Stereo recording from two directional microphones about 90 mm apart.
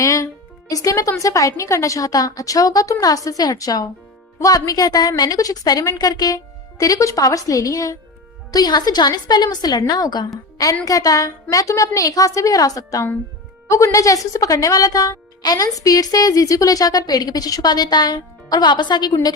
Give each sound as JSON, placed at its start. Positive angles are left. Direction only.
{"t": 0.0, "sound": "a woman's voice", "side_deg": 35}